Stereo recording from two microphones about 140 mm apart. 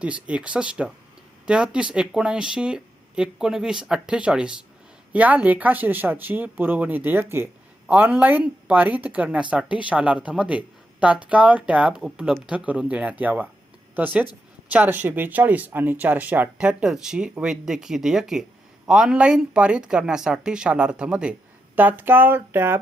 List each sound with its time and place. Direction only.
0.0 s speech: 10° right (ahead or behind)